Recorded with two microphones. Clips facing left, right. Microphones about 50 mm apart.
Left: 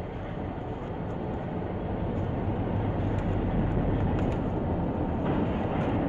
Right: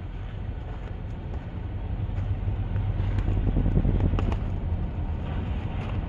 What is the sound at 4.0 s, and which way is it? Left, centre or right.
Vehicle, right.